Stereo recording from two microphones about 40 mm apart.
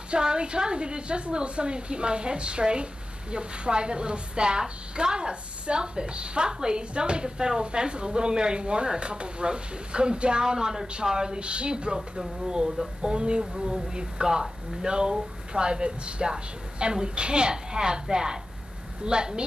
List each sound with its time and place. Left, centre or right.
0.1 s a woman's voice: right